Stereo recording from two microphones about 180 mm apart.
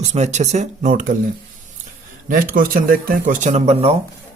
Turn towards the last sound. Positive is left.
turn(degrees=-35)  # may be behind; listen again after turning